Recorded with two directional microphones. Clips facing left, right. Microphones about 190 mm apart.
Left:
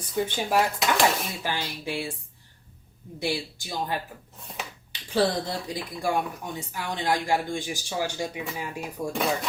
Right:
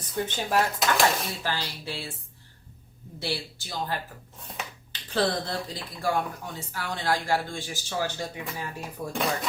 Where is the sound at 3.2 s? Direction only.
15° left (ahead or behind).